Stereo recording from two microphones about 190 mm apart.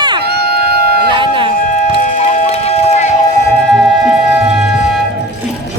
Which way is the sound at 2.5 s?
35° left (ahead or behind).